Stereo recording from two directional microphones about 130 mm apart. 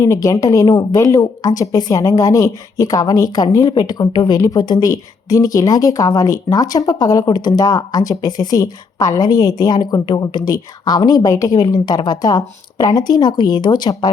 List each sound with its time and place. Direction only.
0.0 s speech: 25° left (ahead or behind)